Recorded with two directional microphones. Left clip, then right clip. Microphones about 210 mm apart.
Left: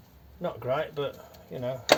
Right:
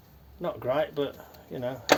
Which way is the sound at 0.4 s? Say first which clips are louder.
Right 2 dB; 35° right (ahead or behind).